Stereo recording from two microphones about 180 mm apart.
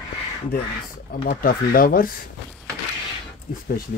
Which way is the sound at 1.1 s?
50° left (ahead or behind).